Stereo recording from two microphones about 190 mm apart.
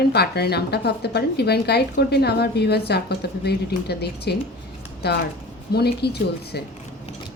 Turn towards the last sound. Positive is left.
turn(degrees=60)  # may be behind; listen again after turning